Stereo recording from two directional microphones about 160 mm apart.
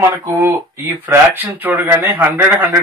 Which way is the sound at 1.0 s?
10° right (ahead or behind).